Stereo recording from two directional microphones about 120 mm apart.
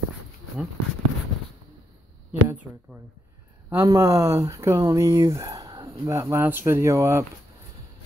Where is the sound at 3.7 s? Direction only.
25° right (ahead or behind).